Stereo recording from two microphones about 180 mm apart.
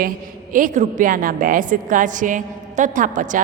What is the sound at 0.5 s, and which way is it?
A woman's voice, 45° right (ahead or behind).